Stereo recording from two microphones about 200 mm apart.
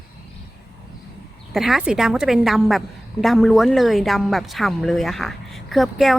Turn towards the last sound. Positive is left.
turn(degrees=0)  # may be behind; listen again after turning